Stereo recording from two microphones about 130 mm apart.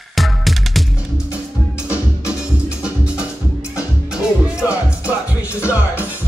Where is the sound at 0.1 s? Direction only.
Centre (ahead or behind).